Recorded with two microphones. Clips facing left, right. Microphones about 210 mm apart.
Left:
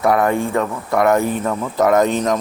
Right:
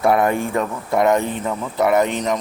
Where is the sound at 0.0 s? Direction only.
25° right (ahead or behind).